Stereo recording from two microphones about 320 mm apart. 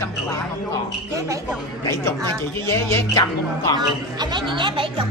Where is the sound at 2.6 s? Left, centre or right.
Centre.